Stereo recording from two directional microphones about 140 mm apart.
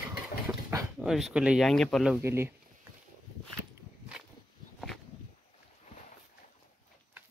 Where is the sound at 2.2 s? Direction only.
15° right (ahead or behind).